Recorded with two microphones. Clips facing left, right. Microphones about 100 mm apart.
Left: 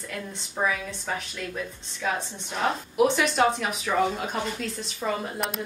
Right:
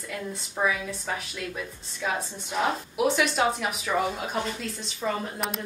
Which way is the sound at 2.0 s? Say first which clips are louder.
Left 1 dB; 5° right (ahead or behind).